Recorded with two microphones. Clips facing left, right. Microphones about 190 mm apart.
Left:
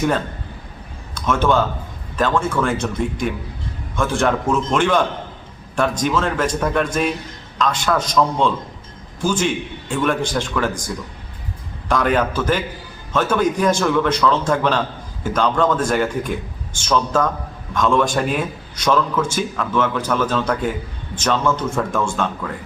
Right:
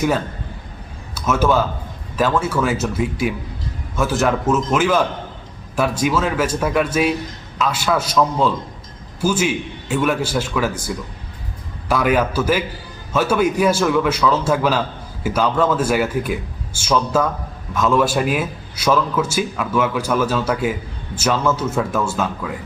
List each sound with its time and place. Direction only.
1.1 s a man's voice: 5° right (ahead or behind)